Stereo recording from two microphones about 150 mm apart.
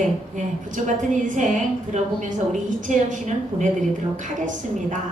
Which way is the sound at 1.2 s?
55° right (ahead or behind).